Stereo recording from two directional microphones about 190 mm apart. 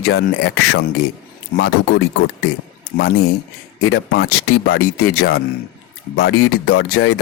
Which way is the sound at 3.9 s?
60° left (ahead or behind).